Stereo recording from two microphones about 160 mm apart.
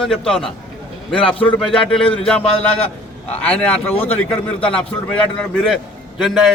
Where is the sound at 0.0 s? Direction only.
5° left (ahead or behind).